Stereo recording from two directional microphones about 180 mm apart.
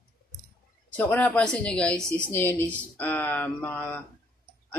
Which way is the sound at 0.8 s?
10° left (ahead or behind).